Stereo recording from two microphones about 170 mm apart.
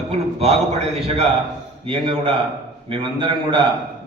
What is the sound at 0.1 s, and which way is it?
A man's voice, 35° right (ahead or behind).